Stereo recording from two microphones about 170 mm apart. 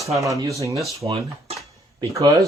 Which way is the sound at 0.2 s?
20° right (ahead or behind).